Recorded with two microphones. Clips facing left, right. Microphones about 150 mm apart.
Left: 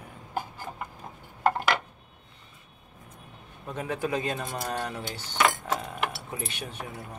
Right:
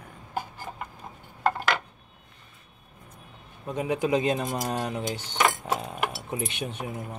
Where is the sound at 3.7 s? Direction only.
15° right (ahead or behind).